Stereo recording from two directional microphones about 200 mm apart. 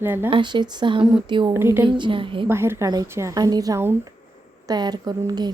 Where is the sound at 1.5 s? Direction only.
10° right (ahead or behind).